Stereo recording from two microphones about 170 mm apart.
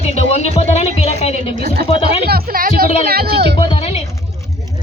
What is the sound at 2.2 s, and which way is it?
Music, 60° right (ahead or behind).